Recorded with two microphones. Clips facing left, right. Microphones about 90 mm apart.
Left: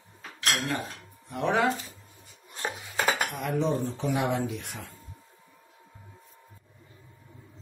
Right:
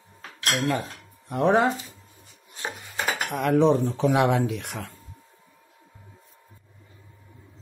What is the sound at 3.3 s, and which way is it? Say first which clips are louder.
Speech: right 8 dB; 75° right (ahead or behind).